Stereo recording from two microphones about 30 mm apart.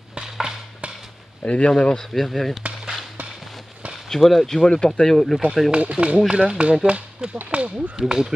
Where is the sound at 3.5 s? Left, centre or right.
Centre.